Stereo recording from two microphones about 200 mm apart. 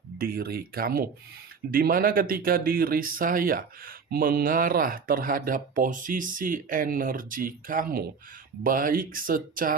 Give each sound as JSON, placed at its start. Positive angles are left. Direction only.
{"t": 0.2, "sound": "speech", "side_deg": -50}